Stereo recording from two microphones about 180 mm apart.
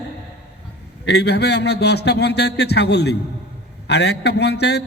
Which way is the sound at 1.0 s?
65° left (ahead or behind).